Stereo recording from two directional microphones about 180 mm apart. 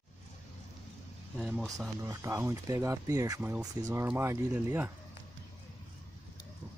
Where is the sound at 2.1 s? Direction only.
15° right (ahead or behind).